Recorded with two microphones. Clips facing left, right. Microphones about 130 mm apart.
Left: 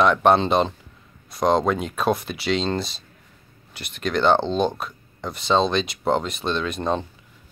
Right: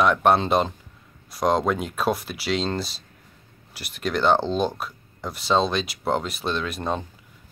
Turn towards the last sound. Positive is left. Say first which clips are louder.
# left 3 dB
turn(degrees=-5)  # may be behind; listen again after turning